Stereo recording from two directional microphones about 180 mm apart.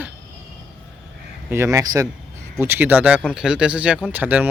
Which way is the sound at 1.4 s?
15° right (ahead or behind).